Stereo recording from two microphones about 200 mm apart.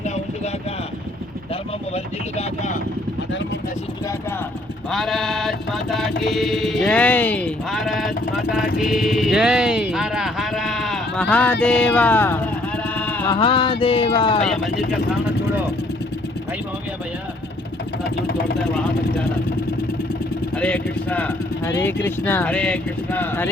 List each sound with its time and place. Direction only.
4.9 s mantra: centre (ahead or behind)
11.6 s a sound: 5° left (ahead or behind)
13.3 s music: 25° left (ahead or behind)
14.4 s mantra: centre (ahead or behind)
20.6 s speech: 5° left (ahead or behind)